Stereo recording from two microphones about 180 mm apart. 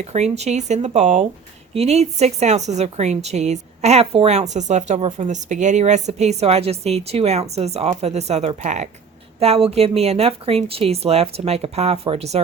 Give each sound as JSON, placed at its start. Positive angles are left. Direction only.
{"t": 0.0, "sound": "speech", "side_deg": -35}